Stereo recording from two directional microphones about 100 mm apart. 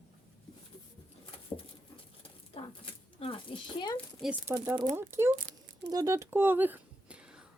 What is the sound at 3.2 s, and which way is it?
Speech, 70° left (ahead or behind).